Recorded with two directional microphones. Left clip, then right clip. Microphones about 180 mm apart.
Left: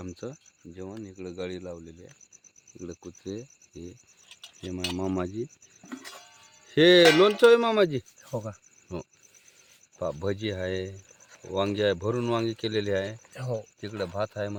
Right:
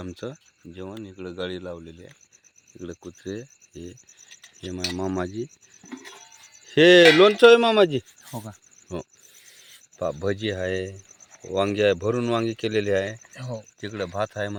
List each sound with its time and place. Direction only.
0.0 s speech: 15° right (ahead or behind)
4.3 s insect: centre (ahead or behind)
6.7 s speech: 10° right (ahead or behind)
10.0 s speech: 10° right (ahead or behind)
13.3 s speech: 60° left (ahead or behind)
13.8 s speech: 25° right (ahead or behind)